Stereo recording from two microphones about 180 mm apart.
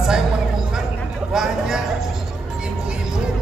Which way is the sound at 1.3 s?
5° right (ahead or behind).